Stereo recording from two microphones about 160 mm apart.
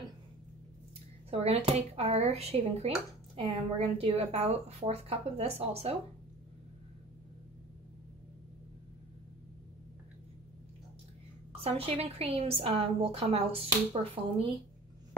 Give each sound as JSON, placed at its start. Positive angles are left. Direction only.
{"t": 1.3, "sound": "a woman's voice", "side_deg": -40}
{"t": 11.6, "sound": "a woman's voice", "side_deg": -35}